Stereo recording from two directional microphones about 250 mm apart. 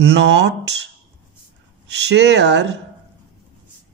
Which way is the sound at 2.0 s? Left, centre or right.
Right.